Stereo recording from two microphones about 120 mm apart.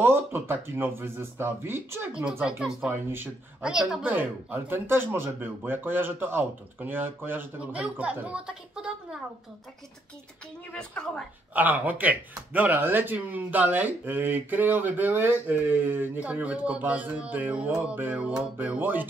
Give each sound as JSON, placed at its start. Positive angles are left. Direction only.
{"t": 0.0, "sound": "speech", "side_deg": -20}
{"t": 10.7, "sound": "a woman's voice", "side_deg": 10}
{"t": 11.5, "sound": "speech", "side_deg": -15}